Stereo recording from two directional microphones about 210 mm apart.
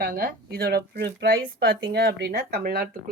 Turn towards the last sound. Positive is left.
turn(degrees=-45)  # may be behind; listen again after turning